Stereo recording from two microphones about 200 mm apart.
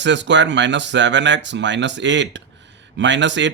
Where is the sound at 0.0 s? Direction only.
65° right (ahead or behind).